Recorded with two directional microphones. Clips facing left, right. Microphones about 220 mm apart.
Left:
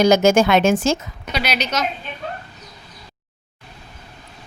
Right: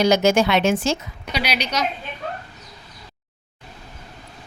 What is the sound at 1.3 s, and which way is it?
Speech, 10° right (ahead or behind).